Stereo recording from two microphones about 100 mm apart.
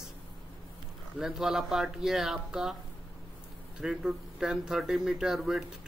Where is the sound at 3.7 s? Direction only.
5° right (ahead or behind).